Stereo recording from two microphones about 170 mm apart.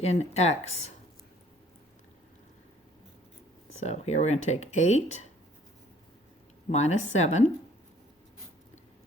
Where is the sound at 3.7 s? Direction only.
40° left (ahead or behind).